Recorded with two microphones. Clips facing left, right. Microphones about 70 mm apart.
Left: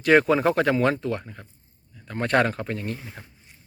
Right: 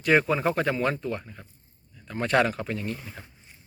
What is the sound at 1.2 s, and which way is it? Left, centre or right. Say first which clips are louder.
Speech: left 3 dB; left.